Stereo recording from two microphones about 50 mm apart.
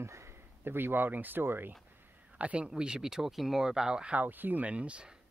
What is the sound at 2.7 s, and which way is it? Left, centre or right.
Speech, centre.